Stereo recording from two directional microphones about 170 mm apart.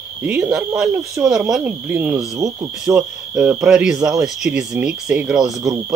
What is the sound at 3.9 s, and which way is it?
Speech, 20° right (ahead or behind).